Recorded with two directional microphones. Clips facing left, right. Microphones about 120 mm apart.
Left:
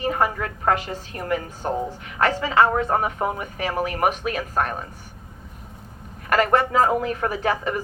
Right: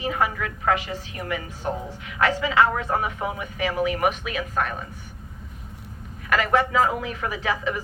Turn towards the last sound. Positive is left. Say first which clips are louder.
# left 3 dB
turn(degrees=45)  # may be behind; listen again after turning